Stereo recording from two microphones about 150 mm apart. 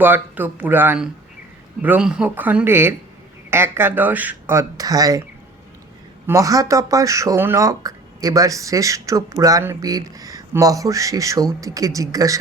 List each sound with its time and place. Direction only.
0.0 s speech: 10° right (ahead or behind)
6.2 s speech: 20° right (ahead or behind)